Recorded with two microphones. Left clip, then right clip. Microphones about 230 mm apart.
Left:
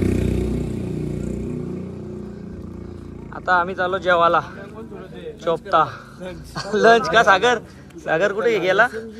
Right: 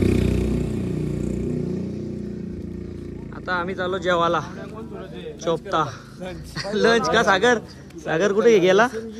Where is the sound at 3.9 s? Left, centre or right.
Centre.